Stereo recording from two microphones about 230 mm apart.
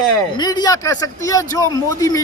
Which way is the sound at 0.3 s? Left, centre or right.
Centre.